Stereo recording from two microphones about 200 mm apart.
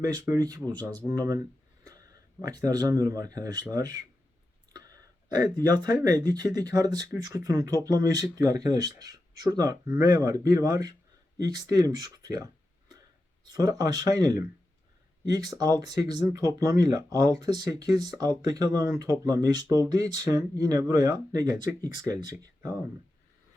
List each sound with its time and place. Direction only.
0.0 s speech: 15° right (ahead or behind)
13.5 s speech: 20° right (ahead or behind)